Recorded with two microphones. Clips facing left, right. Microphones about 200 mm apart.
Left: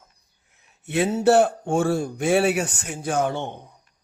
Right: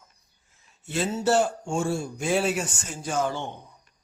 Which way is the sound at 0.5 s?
60° left (ahead or behind).